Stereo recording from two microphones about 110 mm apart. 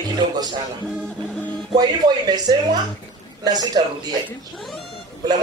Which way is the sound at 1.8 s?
40° right (ahead or behind).